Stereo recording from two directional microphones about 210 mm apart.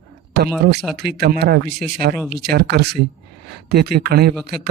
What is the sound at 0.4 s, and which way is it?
Speech, 50° right (ahead or behind).